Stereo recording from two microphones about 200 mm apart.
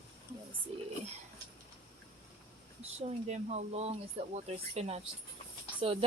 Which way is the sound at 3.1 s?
35° right (ahead or behind).